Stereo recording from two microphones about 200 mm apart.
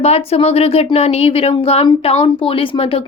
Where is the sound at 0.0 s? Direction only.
30° left (ahead or behind).